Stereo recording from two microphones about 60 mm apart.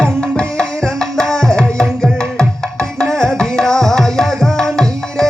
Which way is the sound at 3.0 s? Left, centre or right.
Centre.